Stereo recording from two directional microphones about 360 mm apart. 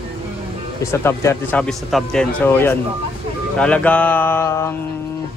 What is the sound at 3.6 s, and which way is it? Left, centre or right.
Mantra, centre.